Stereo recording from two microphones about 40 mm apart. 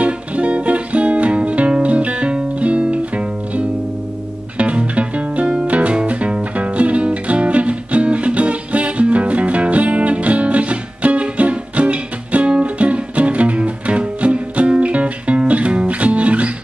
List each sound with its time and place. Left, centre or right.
0.0 s music: right